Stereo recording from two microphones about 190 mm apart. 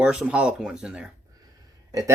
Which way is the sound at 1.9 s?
20° right (ahead or behind).